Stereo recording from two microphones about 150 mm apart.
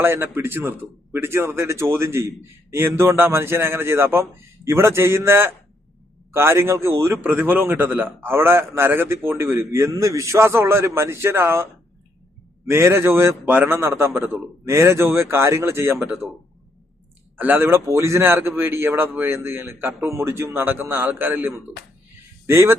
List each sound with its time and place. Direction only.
0.0 s a man's voice: 15° right (ahead or behind)
17.3 s a man's voice: 15° right (ahead or behind)